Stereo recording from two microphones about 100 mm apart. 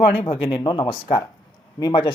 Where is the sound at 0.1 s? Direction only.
60° left (ahead or behind).